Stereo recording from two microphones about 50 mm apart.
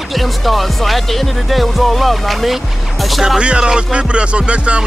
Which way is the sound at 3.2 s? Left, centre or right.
Centre.